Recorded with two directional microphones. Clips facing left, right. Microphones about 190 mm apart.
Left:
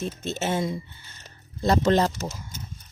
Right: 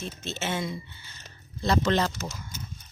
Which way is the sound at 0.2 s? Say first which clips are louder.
Left 4 dB; 40° left (ahead or behind).